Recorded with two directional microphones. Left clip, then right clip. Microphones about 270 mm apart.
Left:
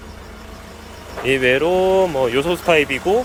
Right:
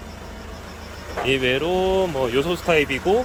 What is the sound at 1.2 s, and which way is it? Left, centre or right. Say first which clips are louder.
Speech: left 5 dB; centre.